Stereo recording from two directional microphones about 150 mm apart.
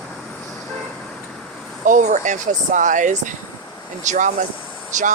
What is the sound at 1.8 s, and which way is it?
Speech, 55° right (ahead or behind).